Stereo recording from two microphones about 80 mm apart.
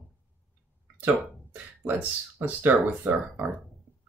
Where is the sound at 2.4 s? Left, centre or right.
Right.